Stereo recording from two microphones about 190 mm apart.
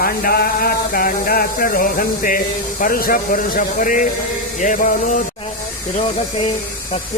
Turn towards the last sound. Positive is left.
turn(degrees=40)  # may be behind; listen again after turning